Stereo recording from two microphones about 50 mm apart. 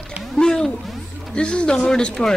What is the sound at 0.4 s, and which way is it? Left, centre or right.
Music, centre.